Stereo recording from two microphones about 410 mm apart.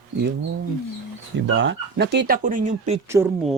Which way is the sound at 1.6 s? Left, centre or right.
Right.